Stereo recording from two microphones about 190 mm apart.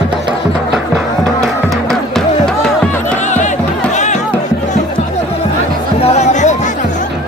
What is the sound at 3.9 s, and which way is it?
Music, 40° left (ahead or behind).